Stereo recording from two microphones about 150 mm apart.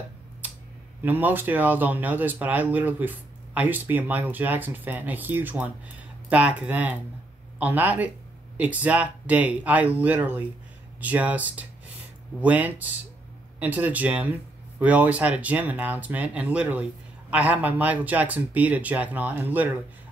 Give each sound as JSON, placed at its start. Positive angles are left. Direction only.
{"t": 1.0, "sound": "speech", "side_deg": -15}